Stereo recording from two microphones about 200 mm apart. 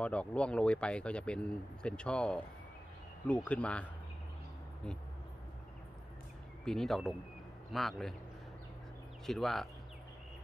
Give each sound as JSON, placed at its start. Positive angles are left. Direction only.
{"t": 0.0, "sound": "speech", "side_deg": 5}
{"t": 6.6, "sound": "speech", "side_deg": 0}
{"t": 9.2, "sound": "speech", "side_deg": 0}